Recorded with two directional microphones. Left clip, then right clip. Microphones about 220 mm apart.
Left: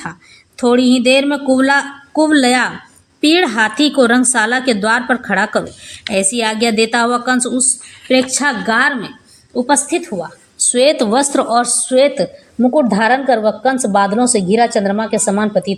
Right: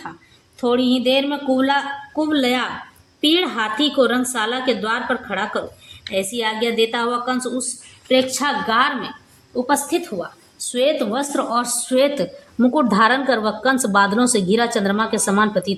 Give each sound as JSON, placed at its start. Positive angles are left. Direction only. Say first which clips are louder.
{"t": 0.6, "sound": "speech", "louder": "left 6 dB", "side_deg": 25}
{"t": 8.0, "sound": "a woman's voice", "louder": "left 4 dB", "side_deg": 10}
{"t": 10.6, "sound": "speech", "louder": "left 7 dB", "side_deg": 20}
{"t": 11.4, "sound": "speech", "louder": "left 7 dB", "side_deg": 10}